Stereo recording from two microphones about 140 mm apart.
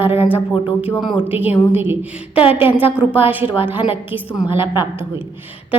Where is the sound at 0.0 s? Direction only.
15° right (ahead or behind).